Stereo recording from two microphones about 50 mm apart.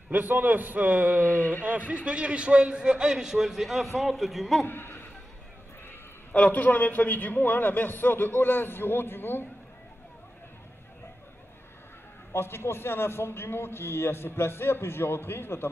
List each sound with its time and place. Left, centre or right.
0.1 s a man's voice: right; by 4.6 s centre
4.6 s speech: left
6.3 s a man's voice: left
12.3 s a man's voice: left